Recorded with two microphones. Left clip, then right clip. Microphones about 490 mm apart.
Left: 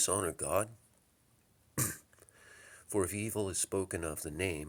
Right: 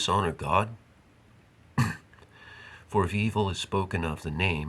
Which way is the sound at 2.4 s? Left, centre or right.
Left.